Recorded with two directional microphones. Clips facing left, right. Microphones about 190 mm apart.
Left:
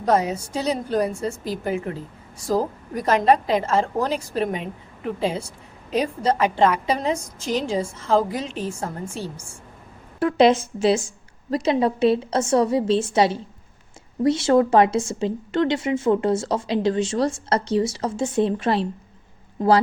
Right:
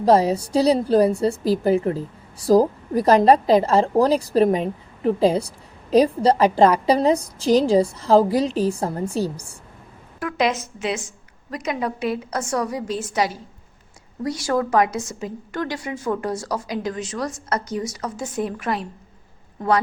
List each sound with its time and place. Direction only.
0.0 s a woman's voice: 30° right (ahead or behind)
10.2 s a woman's voice: 30° left (ahead or behind)